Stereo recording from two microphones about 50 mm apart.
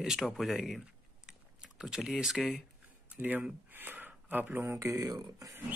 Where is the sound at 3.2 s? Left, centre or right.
Right.